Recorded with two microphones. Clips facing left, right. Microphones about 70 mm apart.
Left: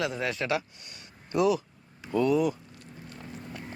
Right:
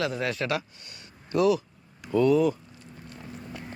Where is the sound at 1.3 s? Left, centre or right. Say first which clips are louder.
Right 2 dB; left.